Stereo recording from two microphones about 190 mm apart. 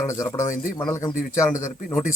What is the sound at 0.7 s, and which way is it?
Speech, 15° left (ahead or behind).